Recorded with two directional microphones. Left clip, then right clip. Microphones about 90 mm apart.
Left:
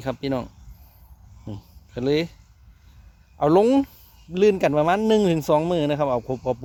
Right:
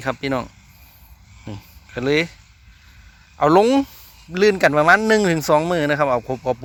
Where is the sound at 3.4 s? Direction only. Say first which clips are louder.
Right 3 dB; 25° left (ahead or behind).